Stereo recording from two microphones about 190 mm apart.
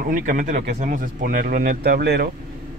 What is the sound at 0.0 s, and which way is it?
A man's voice, 45° right (ahead or behind).